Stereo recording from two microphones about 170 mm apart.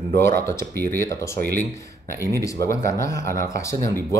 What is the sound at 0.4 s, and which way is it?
Speech, 15° left (ahead or behind).